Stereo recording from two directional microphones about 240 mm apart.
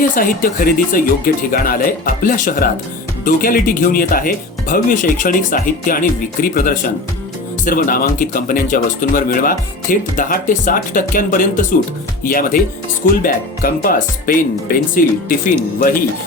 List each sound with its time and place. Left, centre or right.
0.2 s speech: left